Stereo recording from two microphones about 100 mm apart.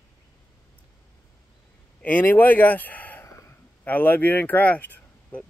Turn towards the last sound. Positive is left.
turn(degrees=15)  # may be behind; listen again after turning